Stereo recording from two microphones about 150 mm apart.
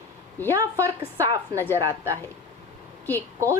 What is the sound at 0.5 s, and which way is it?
A woman's voice, 20° right (ahead or behind).